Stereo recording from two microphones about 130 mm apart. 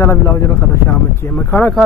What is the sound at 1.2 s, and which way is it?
Speech, 15° left (ahead or behind).